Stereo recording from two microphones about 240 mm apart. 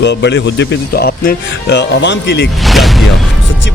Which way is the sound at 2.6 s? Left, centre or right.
Centre.